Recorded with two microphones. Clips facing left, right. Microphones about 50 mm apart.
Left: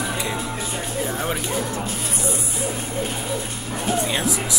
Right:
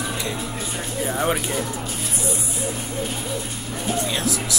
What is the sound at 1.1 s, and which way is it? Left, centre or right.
Speech, centre.